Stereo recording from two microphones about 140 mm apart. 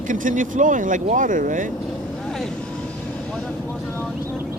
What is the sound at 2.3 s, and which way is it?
Vehicle, 5° left (ahead or behind).